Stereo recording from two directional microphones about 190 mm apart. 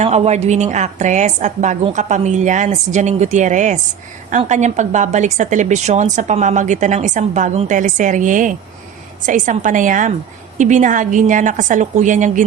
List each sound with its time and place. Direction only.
0.0 s a woman's voice: 35° right (ahead or behind)